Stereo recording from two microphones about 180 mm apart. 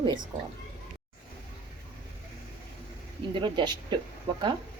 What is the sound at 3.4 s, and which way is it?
Speech, 25° right (ahead or behind).